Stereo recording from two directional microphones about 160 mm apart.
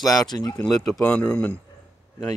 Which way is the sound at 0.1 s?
25° left (ahead or behind).